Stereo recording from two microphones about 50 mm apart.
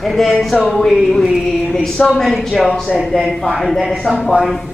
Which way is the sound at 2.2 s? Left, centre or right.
Centre.